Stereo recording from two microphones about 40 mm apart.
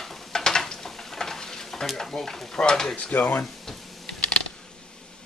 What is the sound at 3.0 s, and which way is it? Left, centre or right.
Speech, left.